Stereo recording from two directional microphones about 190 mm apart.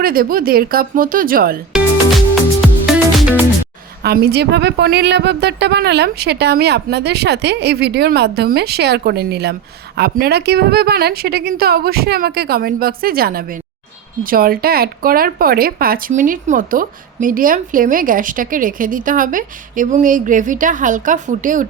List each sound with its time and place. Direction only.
0.0 s speech: 50° right (ahead or behind)
2.3 s music: centre (ahead or behind)
4.0 s a woman's voice: 60° right (ahead or behind); by 21.7 s 45° right (ahead or behind)